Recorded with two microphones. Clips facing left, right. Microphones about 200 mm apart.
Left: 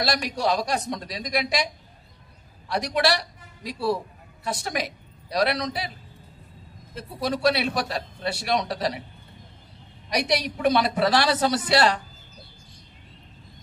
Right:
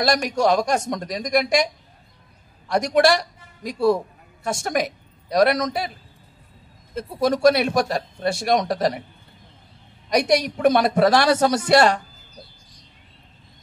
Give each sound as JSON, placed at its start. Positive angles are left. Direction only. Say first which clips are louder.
{"t": 0.0, "sound": "a man's voice", "louder": "right 6 dB", "side_deg": -45}
{"t": 2.7, "sound": "a man's voice", "louder": "right 6 dB", "side_deg": -45}
{"t": 7.0, "sound": "a man's voice", "louder": "right 6 dB", "side_deg": -45}
{"t": 10.0, "sound": "a man's voice", "louder": "right 6 dB", "side_deg": -45}